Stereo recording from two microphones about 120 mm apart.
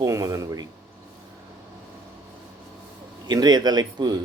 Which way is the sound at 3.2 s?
35° right (ahead or behind).